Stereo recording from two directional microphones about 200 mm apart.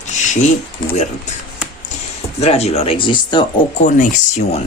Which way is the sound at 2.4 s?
30° left (ahead or behind).